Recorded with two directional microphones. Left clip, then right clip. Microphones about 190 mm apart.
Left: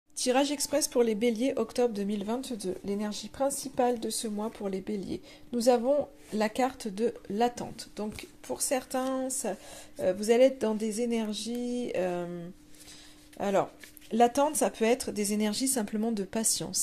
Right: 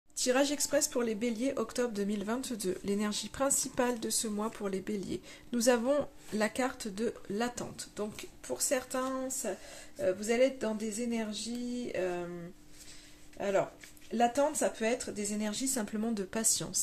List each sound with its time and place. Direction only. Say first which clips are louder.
0.1 s speech: left 2 dB; 15° left (ahead or behind)
2.5 s speech: left 1 dB; 10° right (ahead or behind)
6.3 s speech: left 4 dB; 10° left (ahead or behind)
13.4 s speech: left 3 dB; 30° left (ahead or behind); by 16.7 s 10° left (ahead or behind)